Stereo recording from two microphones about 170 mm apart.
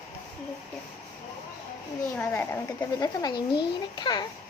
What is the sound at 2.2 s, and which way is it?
Speech, 10° left (ahead or behind).